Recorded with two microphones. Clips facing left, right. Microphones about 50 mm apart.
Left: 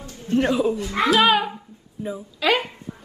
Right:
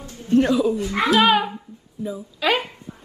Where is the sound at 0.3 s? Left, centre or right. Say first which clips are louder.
Right 2 dB; left.